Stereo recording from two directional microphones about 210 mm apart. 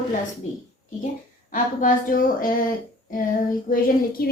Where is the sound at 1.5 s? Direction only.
40° left (ahead or behind).